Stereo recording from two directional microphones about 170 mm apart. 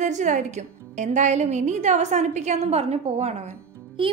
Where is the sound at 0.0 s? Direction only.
45° right (ahead or behind).